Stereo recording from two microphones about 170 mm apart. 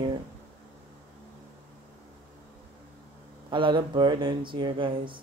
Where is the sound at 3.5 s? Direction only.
30° right (ahead or behind).